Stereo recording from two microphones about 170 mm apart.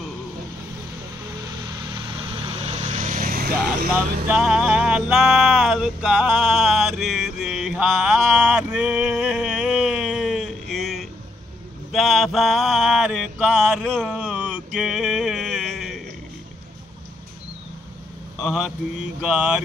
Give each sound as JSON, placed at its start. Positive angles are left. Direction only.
{"t": 1.7, "sound": "vehicle", "side_deg": -30}
{"t": 3.9, "sound": "a sound", "side_deg": -5}
{"t": 11.9, "sound": "mantra", "side_deg": 0}
{"t": 19.2, "sound": "speech", "side_deg": -10}